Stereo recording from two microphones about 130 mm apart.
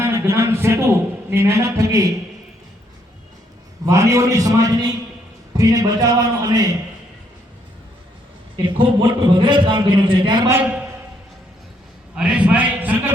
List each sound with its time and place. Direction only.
0.0 s a man's voice: 20° right (ahead or behind)
3.8 s a man's voice: 25° right (ahead or behind)
8.5 s a man's voice: 35° right (ahead or behind)
10.5 s a man's voice: 10° right (ahead or behind)
12.1 s a man's voice: 5° right (ahead or behind)